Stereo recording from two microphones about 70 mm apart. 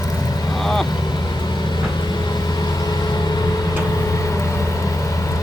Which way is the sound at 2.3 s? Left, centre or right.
Left.